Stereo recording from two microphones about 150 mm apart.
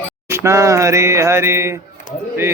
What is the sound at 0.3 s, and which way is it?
Mantra, 20° right (ahead or behind).